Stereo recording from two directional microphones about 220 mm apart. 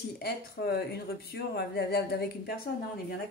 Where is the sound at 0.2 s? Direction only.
45° left (ahead or behind).